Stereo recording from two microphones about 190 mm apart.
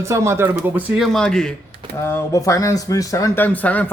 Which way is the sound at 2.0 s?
15° left (ahead or behind).